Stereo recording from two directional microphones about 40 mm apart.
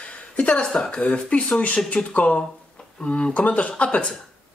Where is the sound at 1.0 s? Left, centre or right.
Left.